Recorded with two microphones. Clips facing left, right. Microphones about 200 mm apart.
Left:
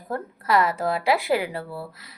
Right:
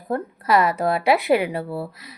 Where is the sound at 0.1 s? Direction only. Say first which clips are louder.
Right 3 dB; 20° right (ahead or behind).